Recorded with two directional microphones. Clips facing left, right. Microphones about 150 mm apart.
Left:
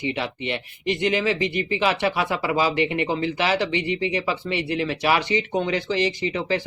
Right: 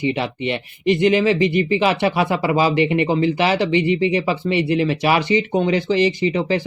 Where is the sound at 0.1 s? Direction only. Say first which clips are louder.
Right 5 dB; 20° right (ahead or behind).